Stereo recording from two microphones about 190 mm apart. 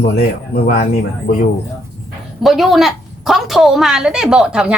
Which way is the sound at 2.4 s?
Centre (ahead or behind).